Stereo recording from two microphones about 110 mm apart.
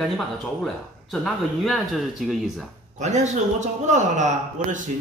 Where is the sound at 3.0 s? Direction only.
90° right.